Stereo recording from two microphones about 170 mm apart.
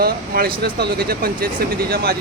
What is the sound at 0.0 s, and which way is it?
Speech, 60° right (ahead or behind).